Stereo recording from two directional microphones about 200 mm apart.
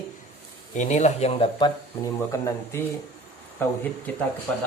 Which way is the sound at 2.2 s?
15° left (ahead or behind).